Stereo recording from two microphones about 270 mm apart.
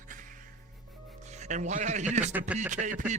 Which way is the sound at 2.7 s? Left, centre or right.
Right.